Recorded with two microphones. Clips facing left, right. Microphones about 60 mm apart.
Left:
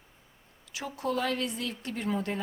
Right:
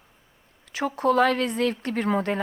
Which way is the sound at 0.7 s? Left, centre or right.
Right.